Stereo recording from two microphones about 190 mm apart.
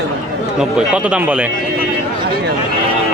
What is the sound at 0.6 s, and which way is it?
Speech, 5° right (ahead or behind).